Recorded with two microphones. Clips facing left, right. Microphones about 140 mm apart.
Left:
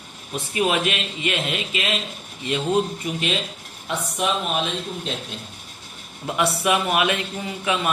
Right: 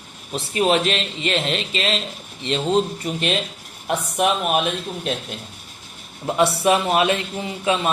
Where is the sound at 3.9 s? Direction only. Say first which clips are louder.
Right 4 dB; 55° right (ahead or behind).